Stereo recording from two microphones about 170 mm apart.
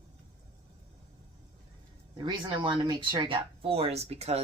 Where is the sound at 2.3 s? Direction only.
30° right (ahead or behind).